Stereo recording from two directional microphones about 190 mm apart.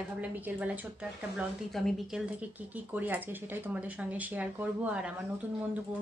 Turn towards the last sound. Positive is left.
turn(degrees=-10)  # may be behind; listen again after turning